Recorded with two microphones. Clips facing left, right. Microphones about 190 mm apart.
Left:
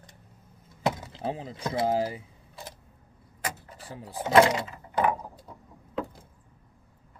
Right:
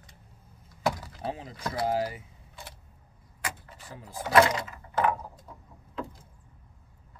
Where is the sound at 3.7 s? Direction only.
35° left (ahead or behind).